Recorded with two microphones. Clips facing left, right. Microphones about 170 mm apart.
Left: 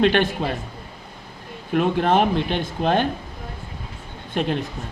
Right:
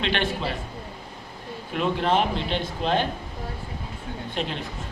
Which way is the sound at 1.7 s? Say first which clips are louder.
Left 5 dB; 50° left (ahead or behind).